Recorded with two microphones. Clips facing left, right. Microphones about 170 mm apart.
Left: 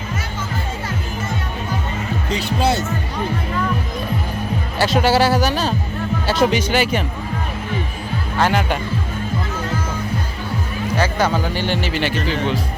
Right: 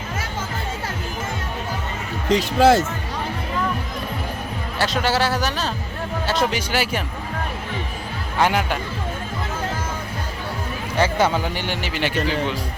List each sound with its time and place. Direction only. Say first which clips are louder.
2.3 s speech: right 5 dB; 90° right
4.8 s a man's voice: left 5 dB; 5° left (ahead or behind)
8.4 s speech: left 1 dB; 15° right (ahead or behind)
10.9 s speech: even; 25° right (ahead or behind)